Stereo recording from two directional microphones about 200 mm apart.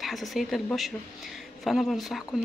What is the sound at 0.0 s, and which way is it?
Speech, centre (ahead or behind).